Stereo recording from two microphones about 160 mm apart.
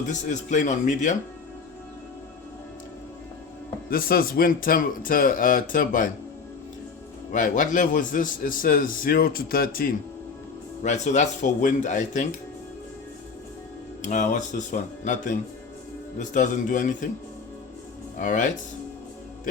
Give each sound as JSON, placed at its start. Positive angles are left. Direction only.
{"t": 0.1, "sound": "speech", "side_deg": 50}
{"t": 3.8, "sound": "a man's voice", "side_deg": 65}
{"t": 7.3, "sound": "a man's voice", "side_deg": 55}
{"t": 10.8, "sound": "speech", "side_deg": 45}
{"t": 14.0, "sound": "speech", "side_deg": 50}
{"t": 18.2, "sound": "speech", "side_deg": 50}